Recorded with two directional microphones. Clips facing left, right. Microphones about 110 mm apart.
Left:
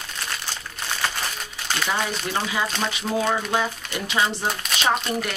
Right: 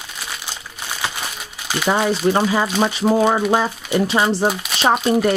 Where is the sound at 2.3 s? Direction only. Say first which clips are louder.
Right 10 dB; 40° right (ahead or behind).